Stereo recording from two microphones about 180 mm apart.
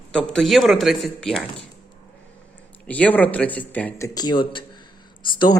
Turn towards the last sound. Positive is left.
turn(degrees=25)  # may be behind; listen again after turning